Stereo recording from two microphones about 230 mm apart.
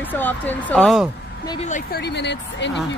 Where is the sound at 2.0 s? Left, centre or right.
Left.